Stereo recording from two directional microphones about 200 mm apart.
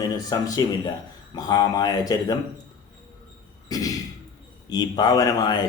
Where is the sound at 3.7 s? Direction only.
20° left (ahead or behind).